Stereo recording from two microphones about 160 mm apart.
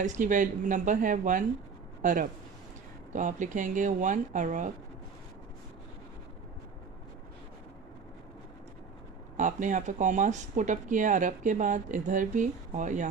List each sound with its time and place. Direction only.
0.0 s speech: 50° right (ahead or behind)
2.0 s a sound: 55° right (ahead or behind)
3.1 s speech: 50° right (ahead or behind)
9.4 s speech: 50° right (ahead or behind)